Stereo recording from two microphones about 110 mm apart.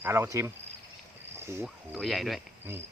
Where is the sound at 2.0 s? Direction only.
Centre (ahead or behind).